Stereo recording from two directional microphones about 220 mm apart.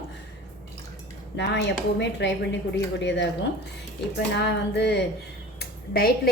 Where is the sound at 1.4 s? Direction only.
50° left (ahead or behind).